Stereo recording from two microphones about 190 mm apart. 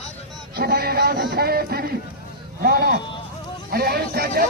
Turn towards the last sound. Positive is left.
turn(degrees=-50)  # may be behind; listen again after turning